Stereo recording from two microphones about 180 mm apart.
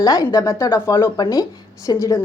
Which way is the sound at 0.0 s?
20° left (ahead or behind).